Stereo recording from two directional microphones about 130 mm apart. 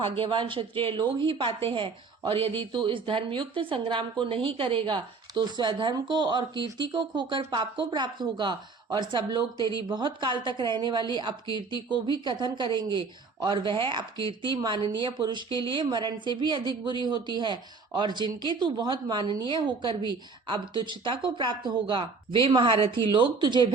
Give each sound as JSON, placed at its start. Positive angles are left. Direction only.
{"t": 0.0, "sound": "a woman's voice", "side_deg": -45}